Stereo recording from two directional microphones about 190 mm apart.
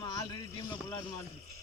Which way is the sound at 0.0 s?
20° left (ahead or behind).